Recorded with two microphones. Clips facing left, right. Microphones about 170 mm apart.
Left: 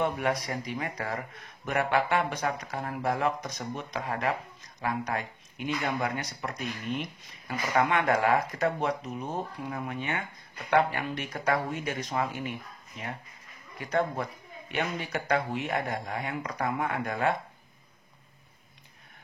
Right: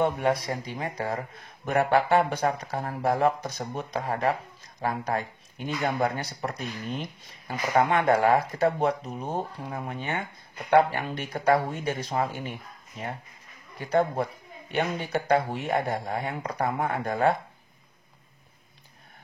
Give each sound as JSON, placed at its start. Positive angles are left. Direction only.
{"t": 0.0, "sound": "speech", "side_deg": -30}